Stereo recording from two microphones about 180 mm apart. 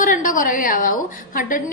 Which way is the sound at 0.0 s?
45° left (ahead or behind).